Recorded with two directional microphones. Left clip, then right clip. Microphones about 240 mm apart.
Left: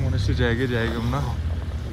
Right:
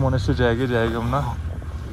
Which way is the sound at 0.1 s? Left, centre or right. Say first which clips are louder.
Right 4 dB; centre.